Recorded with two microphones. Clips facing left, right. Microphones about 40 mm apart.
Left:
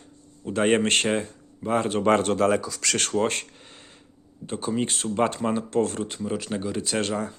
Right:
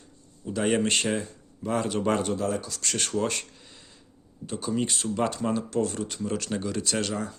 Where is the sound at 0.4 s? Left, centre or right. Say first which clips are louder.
Left 4 dB; left.